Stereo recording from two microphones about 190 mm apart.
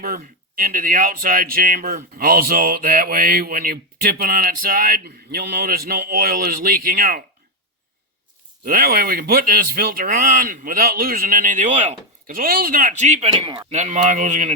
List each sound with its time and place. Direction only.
0.0 s speech: 50° right (ahead or behind)
8.6 s speech: 50° right (ahead or behind)
13.4 s speech: 25° right (ahead or behind)
13.7 s speech: 40° right (ahead or behind)